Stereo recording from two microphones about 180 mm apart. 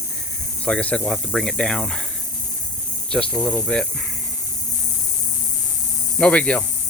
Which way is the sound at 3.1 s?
5° left (ahead or behind).